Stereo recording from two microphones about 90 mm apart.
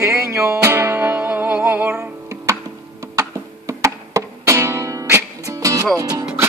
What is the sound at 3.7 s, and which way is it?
Music, 35° right (ahead or behind).